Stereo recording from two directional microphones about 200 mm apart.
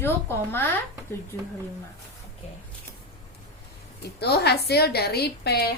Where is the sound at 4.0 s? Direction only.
55° left (ahead or behind).